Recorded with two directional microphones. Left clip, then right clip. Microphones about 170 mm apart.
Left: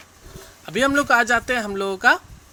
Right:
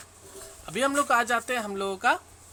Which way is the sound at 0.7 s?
20° left (ahead or behind).